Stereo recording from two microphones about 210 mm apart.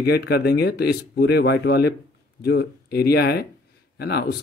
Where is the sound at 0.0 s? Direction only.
50° left (ahead or behind).